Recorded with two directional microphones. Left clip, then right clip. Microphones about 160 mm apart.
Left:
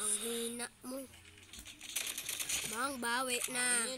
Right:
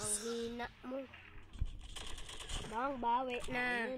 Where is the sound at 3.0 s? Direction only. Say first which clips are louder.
Right 2 dB; 70° left (ahead or behind).